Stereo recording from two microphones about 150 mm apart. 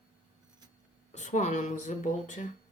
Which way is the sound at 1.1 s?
50° left (ahead or behind).